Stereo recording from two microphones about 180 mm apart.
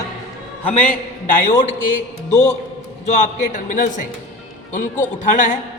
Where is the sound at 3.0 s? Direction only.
45° left (ahead or behind).